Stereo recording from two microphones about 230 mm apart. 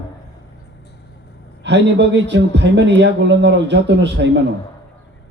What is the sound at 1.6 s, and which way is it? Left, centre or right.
A man's voice, right.